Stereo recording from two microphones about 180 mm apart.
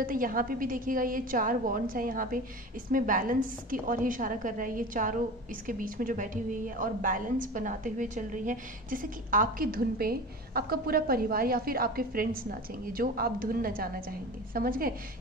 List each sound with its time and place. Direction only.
0.0 s a woman's voice: 50° right (ahead or behind)